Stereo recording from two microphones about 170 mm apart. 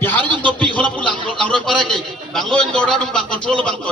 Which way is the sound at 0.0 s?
10° left (ahead or behind).